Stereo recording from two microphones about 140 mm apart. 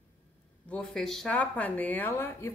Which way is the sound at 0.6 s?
5° left (ahead or behind).